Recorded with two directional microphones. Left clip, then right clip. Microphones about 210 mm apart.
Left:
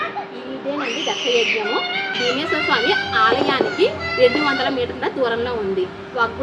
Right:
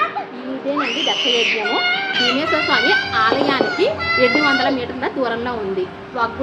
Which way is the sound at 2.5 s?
Centre (ahead or behind).